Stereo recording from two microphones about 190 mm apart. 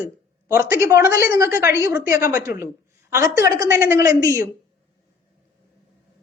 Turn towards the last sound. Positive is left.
turn(degrees=-15)  # may be behind; listen again after turning